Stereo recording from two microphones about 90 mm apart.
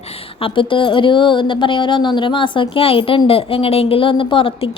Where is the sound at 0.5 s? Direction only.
70° left (ahead or behind).